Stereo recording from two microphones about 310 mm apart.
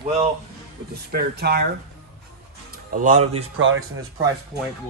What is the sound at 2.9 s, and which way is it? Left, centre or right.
Speech, right.